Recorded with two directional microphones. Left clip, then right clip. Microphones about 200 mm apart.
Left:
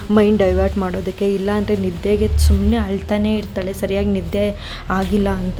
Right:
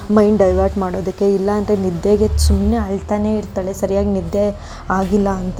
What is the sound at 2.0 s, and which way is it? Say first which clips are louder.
Speech: right 3 dB; 10° right (ahead or behind).